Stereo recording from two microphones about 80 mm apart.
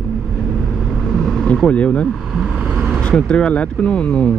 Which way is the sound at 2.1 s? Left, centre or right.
Centre.